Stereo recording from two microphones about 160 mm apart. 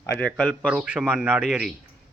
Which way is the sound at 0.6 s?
5° right (ahead or behind).